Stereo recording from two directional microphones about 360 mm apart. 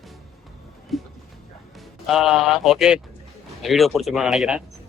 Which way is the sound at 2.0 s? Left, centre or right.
Centre.